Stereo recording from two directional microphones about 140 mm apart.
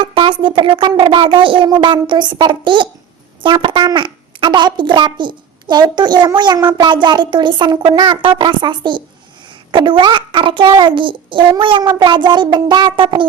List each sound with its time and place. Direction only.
0.0 s a child's voice: 35° right (ahead or behind)